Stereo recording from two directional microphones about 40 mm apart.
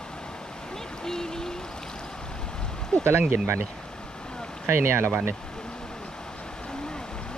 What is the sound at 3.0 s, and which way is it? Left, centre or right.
Speech, right.